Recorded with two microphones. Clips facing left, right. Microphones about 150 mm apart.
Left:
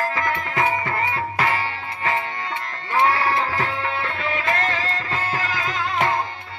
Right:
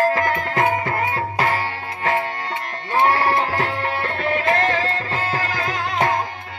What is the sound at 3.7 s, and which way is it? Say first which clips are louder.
Music: right 2 dB; 60° right (ahead or behind).